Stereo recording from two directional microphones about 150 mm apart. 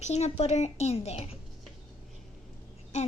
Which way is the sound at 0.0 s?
45° left (ahead or behind).